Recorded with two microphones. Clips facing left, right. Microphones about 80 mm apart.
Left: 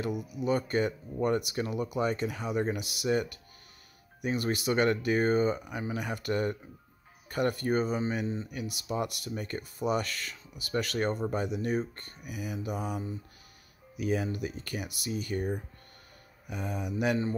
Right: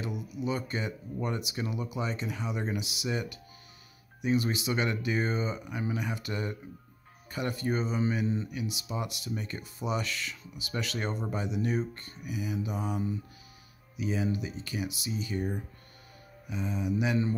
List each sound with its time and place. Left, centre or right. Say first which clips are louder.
0.2 s speech: left 3 dB; left
13.9 s speech: even; left